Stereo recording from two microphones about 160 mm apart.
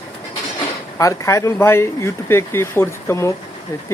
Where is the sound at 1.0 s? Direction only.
20° left (ahead or behind).